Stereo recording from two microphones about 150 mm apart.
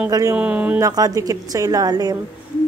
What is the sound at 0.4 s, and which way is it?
Speech, 10° right (ahead or behind).